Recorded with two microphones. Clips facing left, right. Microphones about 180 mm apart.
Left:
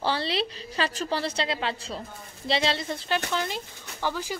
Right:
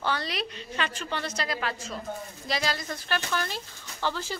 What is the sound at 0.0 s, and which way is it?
A woman's voice, 30° left (ahead or behind).